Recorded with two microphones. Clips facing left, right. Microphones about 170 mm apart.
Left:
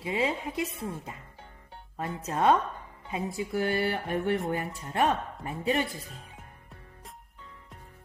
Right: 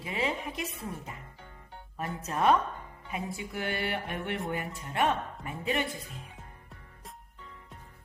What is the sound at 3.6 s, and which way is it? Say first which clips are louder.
Speech: left 5 dB; 40° left (ahead or behind).